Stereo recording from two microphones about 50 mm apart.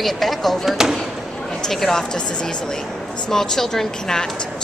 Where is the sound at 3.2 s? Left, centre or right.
Centre.